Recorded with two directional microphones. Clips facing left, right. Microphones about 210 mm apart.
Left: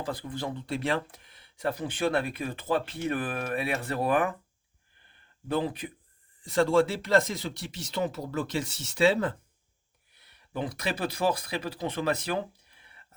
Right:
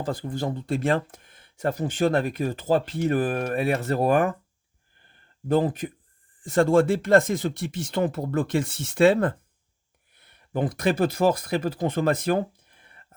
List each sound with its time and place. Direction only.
0.0 s speech: 45° right (ahead or behind)
5.0 s a sound: 45° right (ahead or behind)
6.4 s speech: 50° right (ahead or behind)